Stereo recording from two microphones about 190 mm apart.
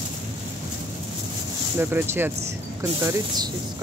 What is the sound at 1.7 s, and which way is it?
Speech, 10° right (ahead or behind).